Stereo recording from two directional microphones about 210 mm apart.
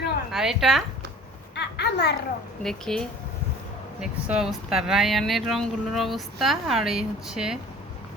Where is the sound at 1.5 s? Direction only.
55° left (ahead or behind).